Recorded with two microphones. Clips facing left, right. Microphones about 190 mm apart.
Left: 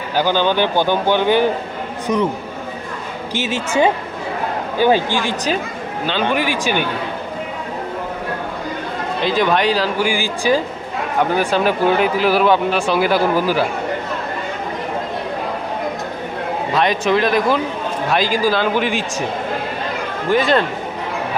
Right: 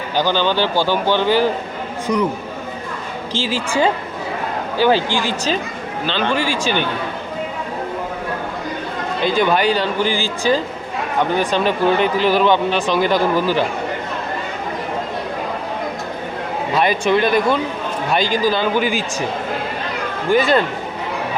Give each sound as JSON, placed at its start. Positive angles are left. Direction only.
{"t": 0.2, "sound": "speech", "side_deg": 10}
{"t": 3.3, "sound": "a woman's voice", "side_deg": 20}
{"t": 6.1, "sound": "speech", "side_deg": 15}
{"t": 9.2, "sound": "speech", "side_deg": 0}
{"t": 10.0, "sound": "speech", "side_deg": 15}
{"t": 16.7, "sound": "speech", "side_deg": 0}
{"t": 20.3, "sound": "speech", "side_deg": 0}